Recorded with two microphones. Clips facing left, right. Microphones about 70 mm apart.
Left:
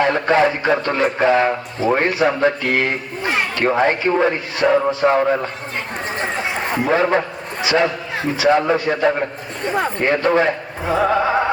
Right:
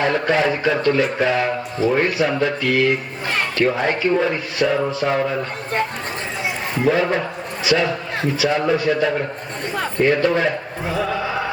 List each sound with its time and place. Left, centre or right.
0.0 s a man's voice: left
7.6 s a sound: left
8.4 s speech: left